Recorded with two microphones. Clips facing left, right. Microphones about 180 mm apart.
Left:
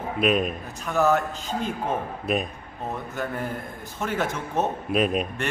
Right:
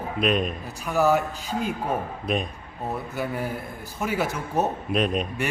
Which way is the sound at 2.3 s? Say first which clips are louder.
Left 1 dB; 5° left (ahead or behind).